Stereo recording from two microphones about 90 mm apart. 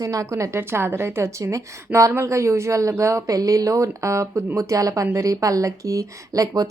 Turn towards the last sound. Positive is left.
turn(degrees=-40)  # may be behind; listen again after turning